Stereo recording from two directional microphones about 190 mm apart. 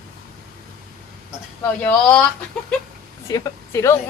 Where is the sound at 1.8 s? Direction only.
10° left (ahead or behind).